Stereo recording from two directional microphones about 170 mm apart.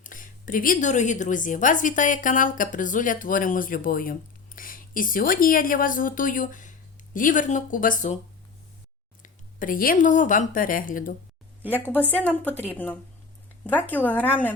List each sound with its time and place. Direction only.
0.0 s a woman's voice: 50° left (ahead or behind)
9.2 s a woman's voice: 50° left (ahead or behind)
12.1 s a woman's voice: 10° left (ahead or behind)